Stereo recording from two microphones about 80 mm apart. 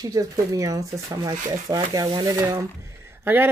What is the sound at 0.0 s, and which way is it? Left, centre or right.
Speech, right.